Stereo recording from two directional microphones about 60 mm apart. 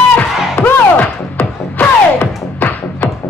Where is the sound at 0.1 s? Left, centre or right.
Left.